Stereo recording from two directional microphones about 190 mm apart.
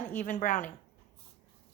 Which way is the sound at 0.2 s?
45° left (ahead or behind).